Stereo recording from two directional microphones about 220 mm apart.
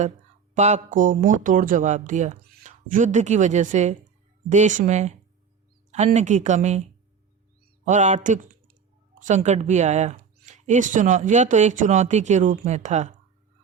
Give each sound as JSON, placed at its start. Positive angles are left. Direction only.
{"t": 0.5, "sound": "speech", "side_deg": -30}
{"t": 7.9, "sound": "speech", "side_deg": -35}